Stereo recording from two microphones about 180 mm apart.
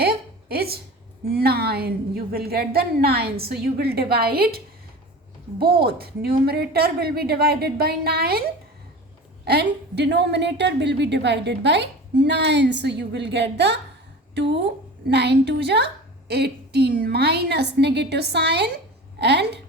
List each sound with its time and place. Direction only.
0.0 s a sound: 60° right (ahead or behind)
1.3 s a woman's voice: 60° right (ahead or behind)
15.1 s a woman's voice: 70° right (ahead or behind)